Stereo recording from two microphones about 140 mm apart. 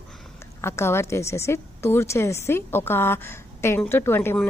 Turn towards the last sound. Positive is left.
turn(degrees=15)  # may be behind; listen again after turning